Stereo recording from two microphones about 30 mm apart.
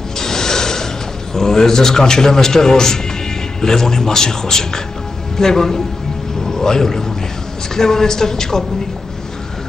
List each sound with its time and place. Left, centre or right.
0.2 s mechanisms: centre
1.3 s a man's voice: centre